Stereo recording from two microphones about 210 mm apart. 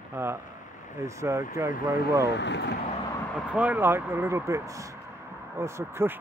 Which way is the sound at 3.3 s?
5° right (ahead or behind).